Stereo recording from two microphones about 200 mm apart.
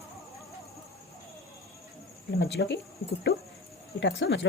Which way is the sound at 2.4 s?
60° left (ahead or behind).